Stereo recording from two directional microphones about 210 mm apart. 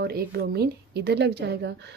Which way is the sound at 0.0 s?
45° right (ahead or behind).